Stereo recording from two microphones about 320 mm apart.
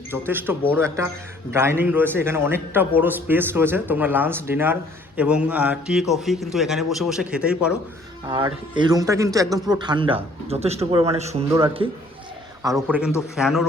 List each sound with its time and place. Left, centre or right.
0.1 s a man's voice: centre
8.3 s a man's voice: centre